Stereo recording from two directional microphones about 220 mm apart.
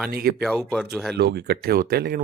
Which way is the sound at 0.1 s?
45° right (ahead or behind).